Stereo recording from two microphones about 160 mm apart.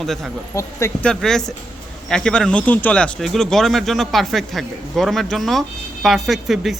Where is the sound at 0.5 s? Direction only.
20° left (ahead or behind).